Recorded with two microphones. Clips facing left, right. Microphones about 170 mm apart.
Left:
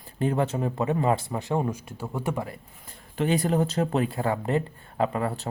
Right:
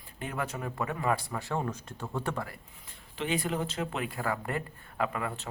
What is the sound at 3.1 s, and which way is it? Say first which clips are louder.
Speech: left 8 dB; 40° left (ahead or behind).